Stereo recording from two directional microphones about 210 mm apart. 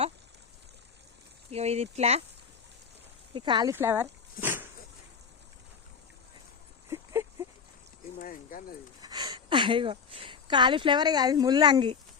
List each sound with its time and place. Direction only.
1.5 s speech: 30° right (ahead or behind)
3.3 s speech: 20° right (ahead or behind)
3.8 s dog: 10° right (ahead or behind)
6.9 s a sound: 15° right (ahead or behind)
8.2 s a sound: 40° left (ahead or behind)
9.0 s speech: 20° right (ahead or behind)